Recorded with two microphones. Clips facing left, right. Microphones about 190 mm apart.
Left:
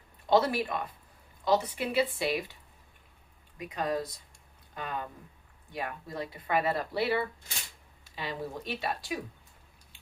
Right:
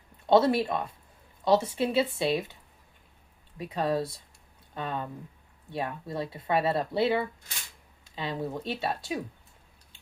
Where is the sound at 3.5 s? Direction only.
30° right (ahead or behind).